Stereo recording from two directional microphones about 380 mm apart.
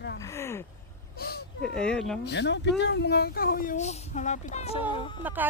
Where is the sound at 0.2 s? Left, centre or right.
Centre.